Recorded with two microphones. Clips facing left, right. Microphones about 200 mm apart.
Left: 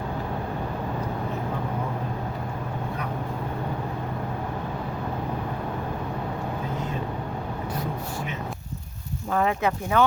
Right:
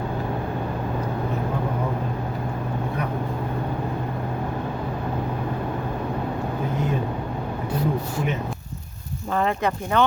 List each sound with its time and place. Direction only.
9.3 s speech: 5° left (ahead or behind)